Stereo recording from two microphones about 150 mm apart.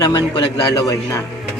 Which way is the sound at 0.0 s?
30° left (ahead or behind).